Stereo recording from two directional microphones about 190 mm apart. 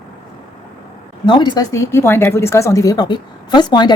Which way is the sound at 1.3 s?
25° left (ahead or behind).